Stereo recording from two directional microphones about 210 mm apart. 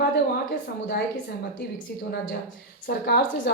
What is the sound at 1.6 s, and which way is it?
Speech, 50° left (ahead or behind).